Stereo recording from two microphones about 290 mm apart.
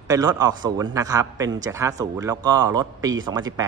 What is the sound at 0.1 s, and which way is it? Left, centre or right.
Speech, centre.